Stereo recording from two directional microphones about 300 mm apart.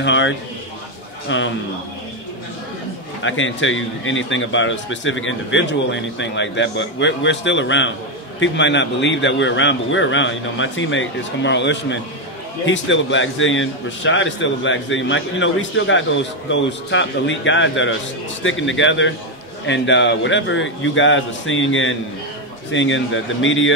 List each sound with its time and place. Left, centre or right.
0.0 s a man's voice: left
1.3 s a man's voice: left
3.2 s a man's voice: left